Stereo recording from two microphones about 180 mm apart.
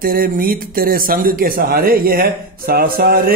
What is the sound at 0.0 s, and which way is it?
Speech, 55° right (ahead or behind).